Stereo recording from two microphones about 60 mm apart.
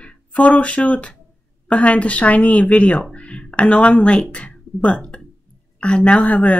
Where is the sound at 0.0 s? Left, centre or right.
Left.